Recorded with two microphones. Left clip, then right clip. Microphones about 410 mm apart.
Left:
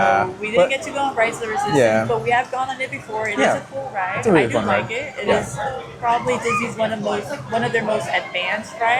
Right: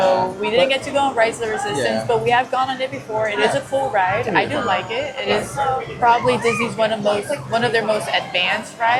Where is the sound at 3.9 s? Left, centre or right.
Centre.